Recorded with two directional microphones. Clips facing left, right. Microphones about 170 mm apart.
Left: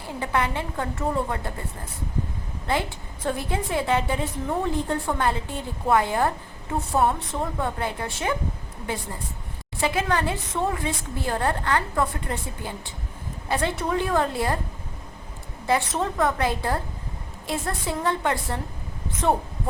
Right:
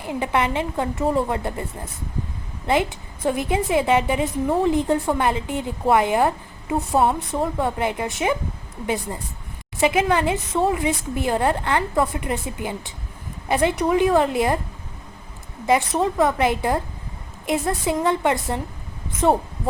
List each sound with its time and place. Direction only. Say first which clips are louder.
0.0 s a woman's voice: right 4 dB; 15° right (ahead or behind)
3.2 s a woman's voice: right 6 dB; 15° right (ahead or behind)
9.8 s a woman's voice: right 5 dB; 15° right (ahead or behind)
15.6 s a woman's voice: right 4 dB; 15° right (ahead or behind)